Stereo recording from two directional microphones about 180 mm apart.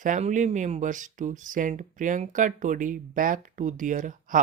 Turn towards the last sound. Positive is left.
turn(degrees=-45)  # may be behind; listen again after turning